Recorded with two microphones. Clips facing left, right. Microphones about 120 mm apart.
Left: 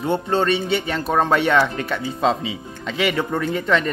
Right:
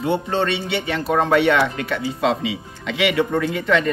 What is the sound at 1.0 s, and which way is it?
Speech, 30° left (ahead or behind).